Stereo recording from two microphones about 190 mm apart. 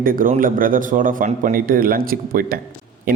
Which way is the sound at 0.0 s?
50° right (ahead or behind).